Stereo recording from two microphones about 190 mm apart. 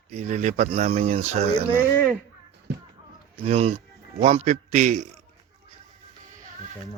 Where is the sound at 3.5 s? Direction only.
30° right (ahead or behind).